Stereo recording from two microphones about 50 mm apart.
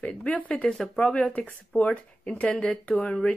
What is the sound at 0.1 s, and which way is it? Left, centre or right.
Speech, centre.